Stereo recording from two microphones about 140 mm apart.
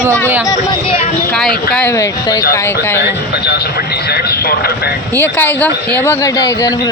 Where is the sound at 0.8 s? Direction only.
40° left (ahead or behind).